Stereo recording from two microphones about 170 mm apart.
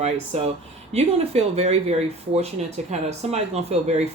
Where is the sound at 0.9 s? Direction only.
40° right (ahead or behind).